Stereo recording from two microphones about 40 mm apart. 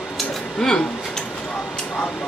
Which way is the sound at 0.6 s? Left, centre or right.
Centre.